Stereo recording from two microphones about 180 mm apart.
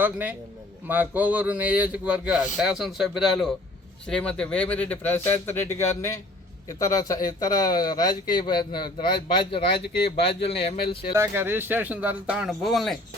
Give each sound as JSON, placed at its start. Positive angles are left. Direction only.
{"t": 0.0, "sound": "speech", "side_deg": -10}
{"t": 11.1, "sound": "speech", "side_deg": -15}